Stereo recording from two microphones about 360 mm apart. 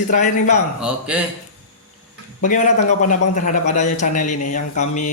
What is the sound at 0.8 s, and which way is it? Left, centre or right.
Speech, centre.